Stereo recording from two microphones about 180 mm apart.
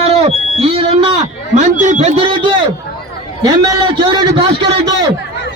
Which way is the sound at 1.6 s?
40° right (ahead or behind).